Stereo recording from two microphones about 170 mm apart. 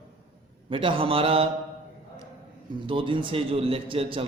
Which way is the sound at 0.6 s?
30° right (ahead or behind).